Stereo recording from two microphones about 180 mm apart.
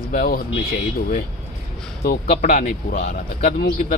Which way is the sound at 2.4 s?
50° left (ahead or behind).